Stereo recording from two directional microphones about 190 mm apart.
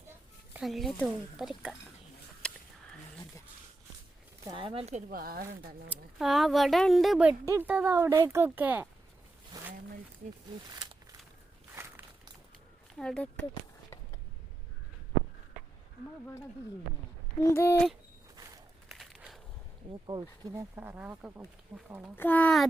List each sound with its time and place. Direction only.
0.5 s speech: centre (ahead or behind)
2.4 s a sound: 5° left (ahead or behind)
4.4 s speech: 25° right (ahead or behind); by 5.5 s 50° right (ahead or behind)
5.9 s speech: centre (ahead or behind)
11.7 s a sound: 15° right (ahead or behind)
13.0 s speech: 5° left (ahead or behind)
17.4 s speech: 15° left (ahead or behind)
18.9 s a sound: centre (ahead or behind)
19.9 s speech: 25° right (ahead or behind)
22.1 s speech: 10° left (ahead or behind)